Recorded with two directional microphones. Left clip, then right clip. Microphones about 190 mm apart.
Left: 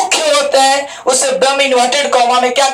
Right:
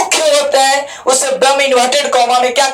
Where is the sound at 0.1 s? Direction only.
5° right (ahead or behind).